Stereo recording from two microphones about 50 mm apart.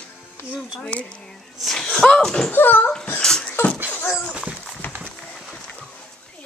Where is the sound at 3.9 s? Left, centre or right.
Left.